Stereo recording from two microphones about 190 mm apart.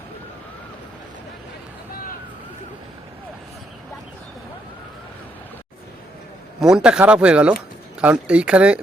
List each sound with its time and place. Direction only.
6.6 s speech: 5° right (ahead or behind)